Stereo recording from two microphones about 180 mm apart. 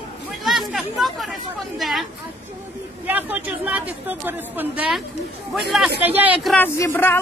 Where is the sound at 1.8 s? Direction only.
Centre (ahead or behind).